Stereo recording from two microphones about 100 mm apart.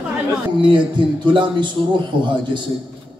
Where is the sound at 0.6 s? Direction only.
50° right (ahead or behind).